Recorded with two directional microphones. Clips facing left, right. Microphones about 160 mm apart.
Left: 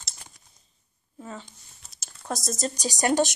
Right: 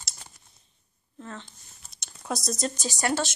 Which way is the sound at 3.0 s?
15° left (ahead or behind).